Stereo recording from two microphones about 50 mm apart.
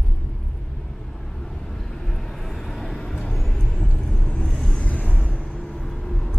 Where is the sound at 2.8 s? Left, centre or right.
Centre; by 5.2 s left.